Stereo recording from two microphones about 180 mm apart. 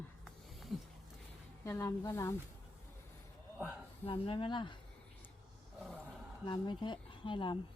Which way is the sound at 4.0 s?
30° left (ahead or behind).